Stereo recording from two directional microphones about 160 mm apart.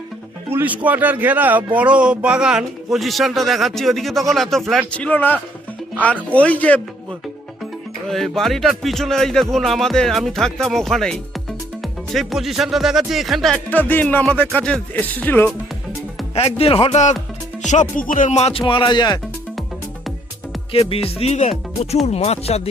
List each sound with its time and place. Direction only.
0.5 s a man's voice: 10° right (ahead or behind); by 6.8 s 10° left (ahead or behind)
8.1 s a man's voice: centre (ahead or behind)
16.3 s speech: 40° left (ahead or behind)
17.7 s music: 55° left (ahead or behind)
18.7 s speech: 30° left (ahead or behind)
20.7 s speech: 35° left (ahead or behind)